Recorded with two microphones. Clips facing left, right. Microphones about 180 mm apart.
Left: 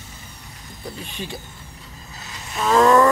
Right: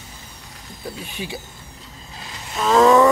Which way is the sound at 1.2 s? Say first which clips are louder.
Right 1 dB; 10° right (ahead or behind).